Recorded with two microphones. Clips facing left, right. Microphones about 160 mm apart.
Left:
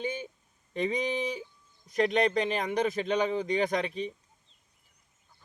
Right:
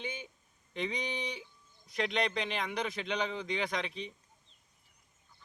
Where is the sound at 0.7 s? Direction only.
45° left (ahead or behind).